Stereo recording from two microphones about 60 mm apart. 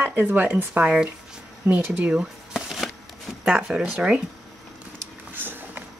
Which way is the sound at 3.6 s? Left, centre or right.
Centre.